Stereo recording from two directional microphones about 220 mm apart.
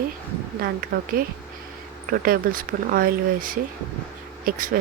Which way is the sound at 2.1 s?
40° right (ahead or behind).